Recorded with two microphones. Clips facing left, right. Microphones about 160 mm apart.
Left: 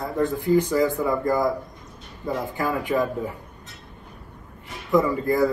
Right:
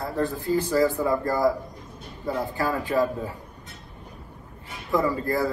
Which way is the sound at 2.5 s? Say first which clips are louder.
Left 1 dB; 20° left (ahead or behind).